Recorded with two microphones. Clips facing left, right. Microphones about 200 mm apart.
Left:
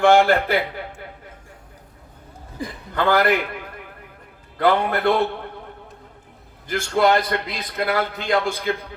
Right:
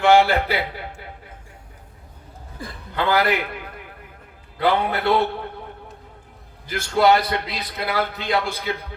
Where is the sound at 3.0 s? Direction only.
50° left (ahead or behind).